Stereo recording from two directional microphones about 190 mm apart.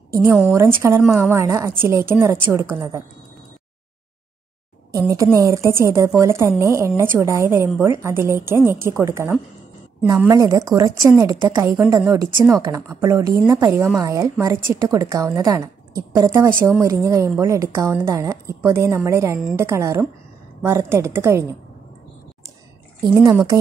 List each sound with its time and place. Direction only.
0.1 s a woman's voice: 15° right (ahead or behind)
1.0 s a woman's voice: centre (ahead or behind)
1.3 s a woman's voice: 15° right (ahead or behind)
4.9 s a woman's voice: 15° right (ahead or behind)